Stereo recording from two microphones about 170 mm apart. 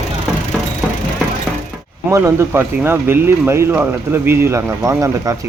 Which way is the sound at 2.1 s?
15° right (ahead or behind).